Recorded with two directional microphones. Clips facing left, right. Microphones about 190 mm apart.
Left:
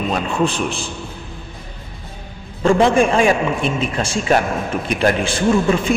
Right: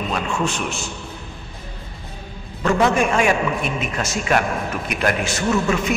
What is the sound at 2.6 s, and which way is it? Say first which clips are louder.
A man's voice: left 4 dB; 30° left (ahead or behind).